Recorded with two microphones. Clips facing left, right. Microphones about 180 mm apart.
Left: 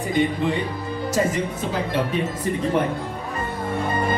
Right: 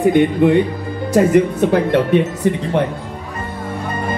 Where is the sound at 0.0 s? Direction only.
60° right (ahead or behind).